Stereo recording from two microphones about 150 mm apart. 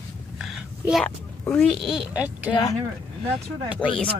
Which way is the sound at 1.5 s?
5° left (ahead or behind).